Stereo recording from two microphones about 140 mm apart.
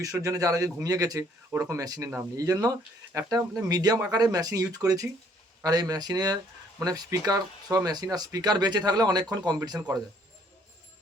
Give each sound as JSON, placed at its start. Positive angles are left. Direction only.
{"t": 0.0, "sound": "speech", "side_deg": -25}